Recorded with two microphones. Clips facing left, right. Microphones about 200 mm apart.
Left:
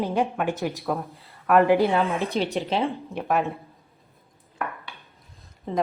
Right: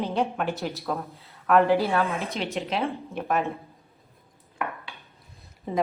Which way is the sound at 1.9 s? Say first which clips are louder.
Left 2 dB; 15° left (ahead or behind).